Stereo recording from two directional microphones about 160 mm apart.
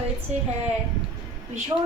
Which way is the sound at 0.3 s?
45° right (ahead or behind).